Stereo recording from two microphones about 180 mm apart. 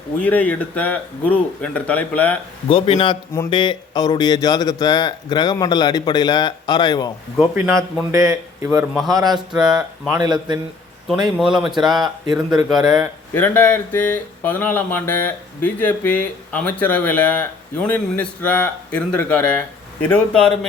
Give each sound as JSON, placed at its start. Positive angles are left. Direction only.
{"t": 0.2, "sound": "speech", "side_deg": 10}
{"t": 2.6, "sound": "speech", "side_deg": 30}
{"t": 7.5, "sound": "a man's voice", "side_deg": -15}
{"t": 9.5, "sound": "speech", "side_deg": -5}
{"t": 10.1, "sound": "speech", "side_deg": -20}
{"t": 11.3, "sound": "speech", "side_deg": -5}
{"t": 12.0, "sound": "speech", "side_deg": -20}
{"t": 12.6, "sound": "speech", "side_deg": 0}
{"t": 13.3, "sound": "speech", "side_deg": 10}